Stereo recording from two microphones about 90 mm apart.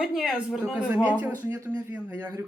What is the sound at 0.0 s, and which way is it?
Speech, centre (ahead or behind).